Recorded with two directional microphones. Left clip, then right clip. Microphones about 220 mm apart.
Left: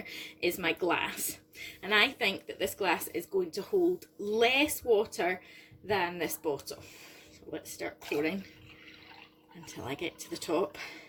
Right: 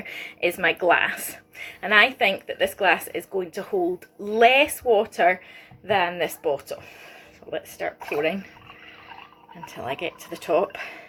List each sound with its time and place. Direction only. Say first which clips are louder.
0.0 s speech: right 8 dB; 55° left (ahead or behind)
4.3 s speech: right 10 dB; 55° left (ahead or behind)
9.6 s speech: right 8 dB; 55° left (ahead or behind)